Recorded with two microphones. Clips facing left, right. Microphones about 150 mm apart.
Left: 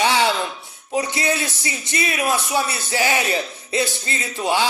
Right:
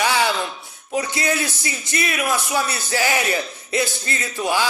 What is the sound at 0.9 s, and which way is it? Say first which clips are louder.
A man's voice: even; 25° left (ahead or behind).